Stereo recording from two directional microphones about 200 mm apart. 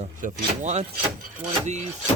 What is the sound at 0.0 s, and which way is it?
Speech, 40° right (ahead or behind).